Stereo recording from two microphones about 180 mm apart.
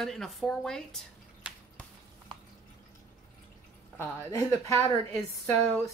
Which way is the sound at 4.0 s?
20° left (ahead or behind).